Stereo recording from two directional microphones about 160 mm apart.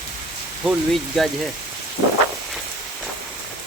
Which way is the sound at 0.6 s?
Centre (ahead or behind).